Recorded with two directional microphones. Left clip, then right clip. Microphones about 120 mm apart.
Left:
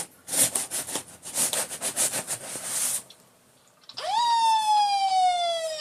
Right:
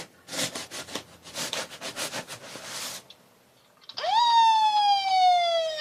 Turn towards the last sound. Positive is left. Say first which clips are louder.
# right 3 dB
turn(degrees=-35)  # may be behind; listen again after turning